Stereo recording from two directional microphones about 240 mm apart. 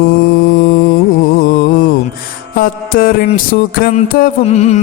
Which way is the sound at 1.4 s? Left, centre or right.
Left.